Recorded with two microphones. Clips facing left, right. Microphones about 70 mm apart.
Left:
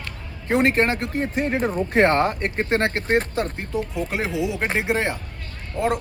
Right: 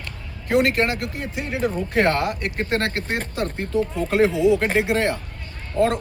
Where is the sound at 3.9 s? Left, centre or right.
Centre.